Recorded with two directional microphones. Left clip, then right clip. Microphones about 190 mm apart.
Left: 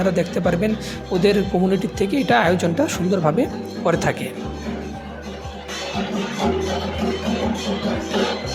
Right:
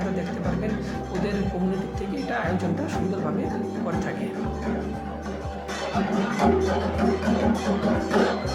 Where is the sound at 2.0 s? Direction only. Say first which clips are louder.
Left 14 dB; 45° left (ahead or behind).